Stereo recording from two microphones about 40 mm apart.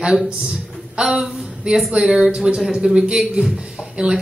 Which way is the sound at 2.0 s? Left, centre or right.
Centre.